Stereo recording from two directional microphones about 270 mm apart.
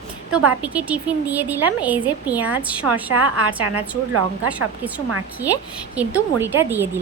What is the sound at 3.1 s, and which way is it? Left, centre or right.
Speech, right.